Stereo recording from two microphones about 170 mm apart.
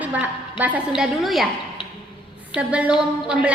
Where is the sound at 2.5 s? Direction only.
5° right (ahead or behind).